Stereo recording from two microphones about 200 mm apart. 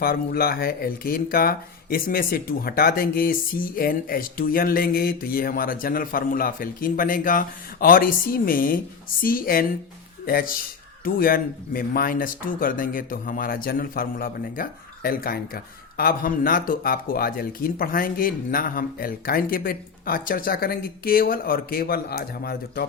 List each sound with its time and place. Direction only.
0.0 s speech: 50° left (ahead or behind)